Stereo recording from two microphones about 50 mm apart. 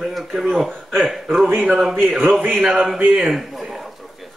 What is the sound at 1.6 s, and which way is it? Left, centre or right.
Speech, centre.